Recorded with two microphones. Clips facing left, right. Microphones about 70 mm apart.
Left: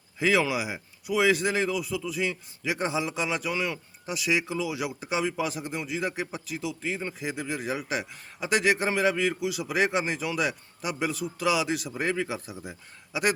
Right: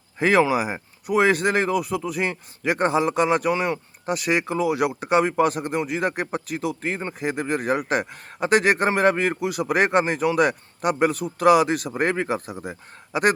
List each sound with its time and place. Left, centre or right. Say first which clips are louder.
0.2 s speech: right 6 dB; right